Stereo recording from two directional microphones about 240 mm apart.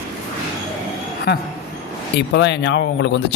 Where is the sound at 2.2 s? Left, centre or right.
Left.